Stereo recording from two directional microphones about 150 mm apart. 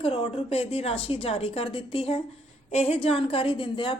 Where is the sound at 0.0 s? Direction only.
35° left (ahead or behind).